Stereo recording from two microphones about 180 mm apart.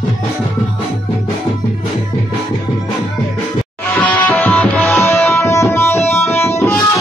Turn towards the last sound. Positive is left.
turn(degrees=15)  # may be behind; listen again after turning